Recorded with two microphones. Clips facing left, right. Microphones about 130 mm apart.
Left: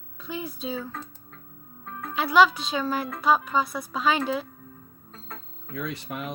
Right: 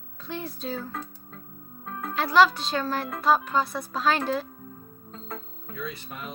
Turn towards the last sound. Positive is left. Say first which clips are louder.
# left 4 dB
turn(degrees=80)